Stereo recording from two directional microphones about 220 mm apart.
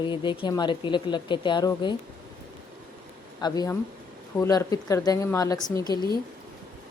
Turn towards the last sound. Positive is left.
turn(degrees=20)  # may be behind; listen again after turning